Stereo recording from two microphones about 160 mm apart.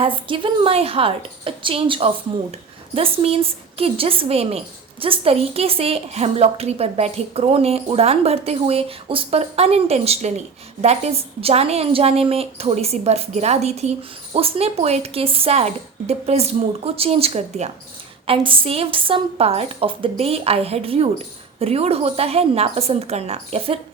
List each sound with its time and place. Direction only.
0.0 s a woman's voice: 30° right (ahead or behind)